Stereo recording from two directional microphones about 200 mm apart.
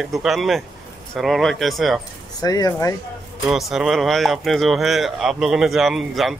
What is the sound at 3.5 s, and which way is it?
Speech, centre (ahead or behind).